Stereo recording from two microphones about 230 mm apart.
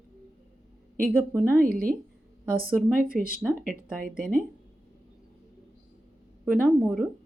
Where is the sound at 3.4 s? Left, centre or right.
Centre.